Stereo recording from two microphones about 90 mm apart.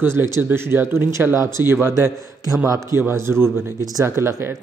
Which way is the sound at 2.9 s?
30° right (ahead or behind).